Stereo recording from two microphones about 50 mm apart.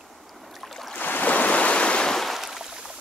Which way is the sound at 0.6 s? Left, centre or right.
Centre.